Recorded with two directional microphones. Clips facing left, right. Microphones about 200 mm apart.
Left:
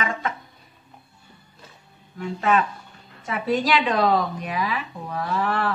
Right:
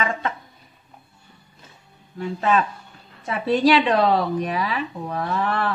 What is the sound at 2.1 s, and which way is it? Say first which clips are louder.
A woman's voice: right 1 dB; 35° right (ahead or behind).